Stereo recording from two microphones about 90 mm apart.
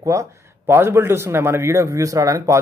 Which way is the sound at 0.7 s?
25° right (ahead or behind).